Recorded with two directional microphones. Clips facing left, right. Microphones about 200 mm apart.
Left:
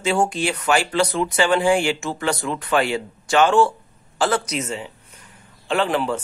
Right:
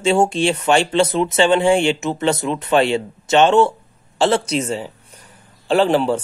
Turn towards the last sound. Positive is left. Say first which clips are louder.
# right 6 dB
turn(degrees=-30)  # may be behind; listen again after turning